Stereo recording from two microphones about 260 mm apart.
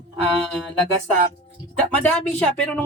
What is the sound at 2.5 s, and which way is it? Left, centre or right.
Speech, centre.